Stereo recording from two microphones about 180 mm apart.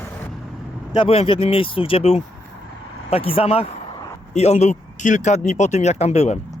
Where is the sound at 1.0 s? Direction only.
30° left (ahead or behind).